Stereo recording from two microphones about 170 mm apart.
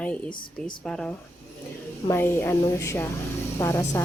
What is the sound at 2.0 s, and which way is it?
Speech, 15° left (ahead or behind).